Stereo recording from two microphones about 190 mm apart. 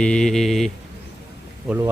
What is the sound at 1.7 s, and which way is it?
Speech, 5° right (ahead or behind).